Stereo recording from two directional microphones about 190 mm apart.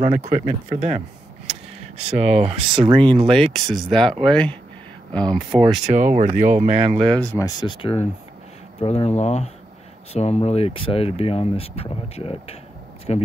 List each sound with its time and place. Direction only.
0.0 s speech: 40° right (ahead or behind)
2.0 s speech: 35° right (ahead or behind)
3.3 s speech: centre (ahead or behind)
5.9 s speech: 40° right (ahead or behind)
7.1 s speech: 5° left (ahead or behind)
7.4 s speech: 25° left (ahead or behind)